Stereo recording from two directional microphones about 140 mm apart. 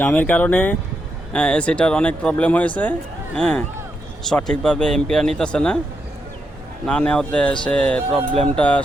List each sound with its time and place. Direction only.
0.0 s speech: 10° left (ahead or behind)
6.8 s speech: 5° left (ahead or behind)